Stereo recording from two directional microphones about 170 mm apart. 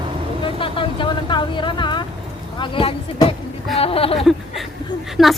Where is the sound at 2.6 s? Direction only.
30° left (ahead or behind).